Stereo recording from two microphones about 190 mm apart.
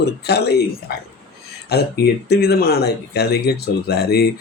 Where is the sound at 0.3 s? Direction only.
60° left (ahead or behind).